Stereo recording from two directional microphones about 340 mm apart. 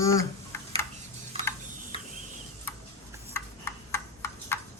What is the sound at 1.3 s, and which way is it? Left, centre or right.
Tick-tock, centre.